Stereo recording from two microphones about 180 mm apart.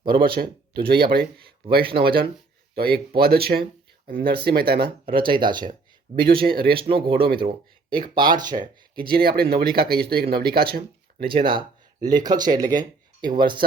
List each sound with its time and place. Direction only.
0.1 s speech: 55° right (ahead or behind)
1.8 s speech: 30° right (ahead or behind)
2.7 s speech: 60° right (ahead or behind)
5.1 s speech: 25° right (ahead or behind)
6.1 s speech: 35° right (ahead or behind)
6.4 s speech: 55° right (ahead or behind)
6.7 s speech: 30° right (ahead or behind)
9.0 s speech: 60° right (ahead or behind)
11.3 s speech: 25° right (ahead or behind)